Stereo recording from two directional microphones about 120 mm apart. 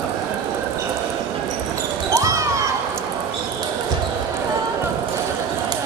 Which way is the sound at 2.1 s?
25° right (ahead or behind).